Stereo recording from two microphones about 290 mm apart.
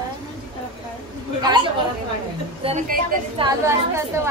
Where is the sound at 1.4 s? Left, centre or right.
Centre.